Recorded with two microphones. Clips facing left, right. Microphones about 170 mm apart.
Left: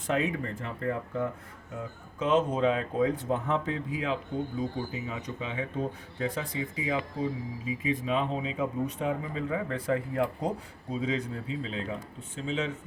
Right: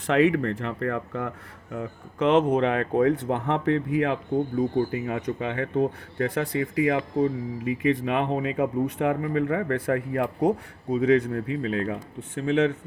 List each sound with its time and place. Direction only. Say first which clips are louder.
0.1 s speech: right 9 dB; 70° right (ahead or behind)